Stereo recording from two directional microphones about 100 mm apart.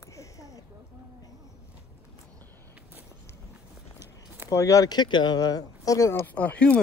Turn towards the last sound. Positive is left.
turn(degrees=15)  # may be behind; listen again after turning